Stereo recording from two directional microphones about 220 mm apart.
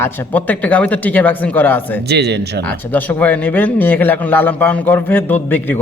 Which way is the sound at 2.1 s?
50° right (ahead or behind).